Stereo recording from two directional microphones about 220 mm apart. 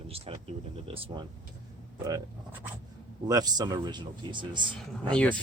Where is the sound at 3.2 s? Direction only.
15° right (ahead or behind).